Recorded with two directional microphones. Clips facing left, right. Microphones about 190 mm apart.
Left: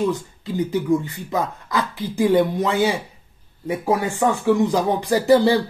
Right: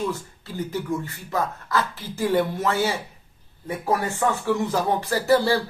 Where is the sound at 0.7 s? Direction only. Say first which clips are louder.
Left 7 dB; 15° left (ahead or behind).